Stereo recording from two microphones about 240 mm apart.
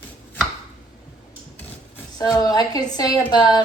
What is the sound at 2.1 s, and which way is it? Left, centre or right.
A woman's voice, centre.